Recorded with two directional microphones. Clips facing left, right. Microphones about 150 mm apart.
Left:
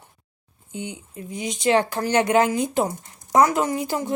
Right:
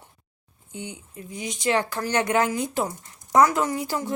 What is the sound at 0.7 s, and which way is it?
Speech, 20° left (ahead or behind).